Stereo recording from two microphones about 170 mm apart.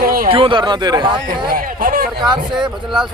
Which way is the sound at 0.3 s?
30° right (ahead or behind).